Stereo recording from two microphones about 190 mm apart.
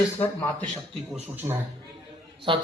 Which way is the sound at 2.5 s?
25° right (ahead or behind).